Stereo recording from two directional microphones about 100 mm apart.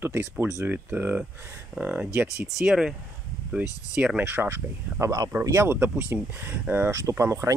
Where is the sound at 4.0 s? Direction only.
15° right (ahead or behind).